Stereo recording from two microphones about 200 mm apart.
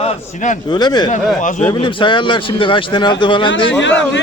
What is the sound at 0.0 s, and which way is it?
Speech, 35° left (ahead or behind).